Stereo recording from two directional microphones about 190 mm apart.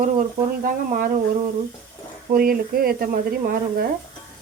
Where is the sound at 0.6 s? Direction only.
50° right (ahead or behind).